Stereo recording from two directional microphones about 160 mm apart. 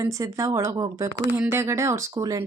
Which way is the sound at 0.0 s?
20° right (ahead or behind).